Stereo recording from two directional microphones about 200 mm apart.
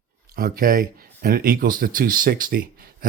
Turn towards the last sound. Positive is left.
turn(degrees=-45)  # may be behind; listen again after turning